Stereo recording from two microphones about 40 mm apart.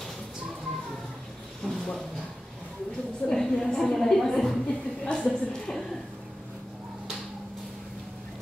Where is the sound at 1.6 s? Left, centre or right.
Centre.